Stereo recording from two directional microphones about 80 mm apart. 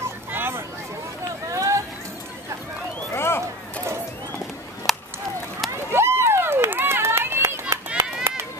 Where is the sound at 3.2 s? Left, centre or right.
Left.